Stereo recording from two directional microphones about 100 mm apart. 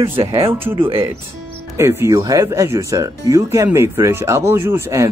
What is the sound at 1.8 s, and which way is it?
Speech, 30° right (ahead or behind).